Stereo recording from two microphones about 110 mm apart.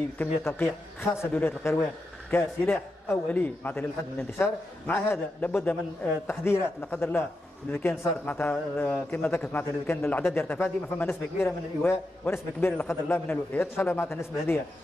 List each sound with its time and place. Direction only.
0.2 s a man's voice: 20° left (ahead or behind)